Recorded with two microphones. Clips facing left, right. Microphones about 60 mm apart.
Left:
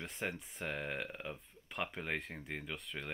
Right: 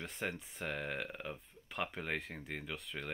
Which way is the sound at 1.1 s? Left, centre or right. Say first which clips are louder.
Even; centre.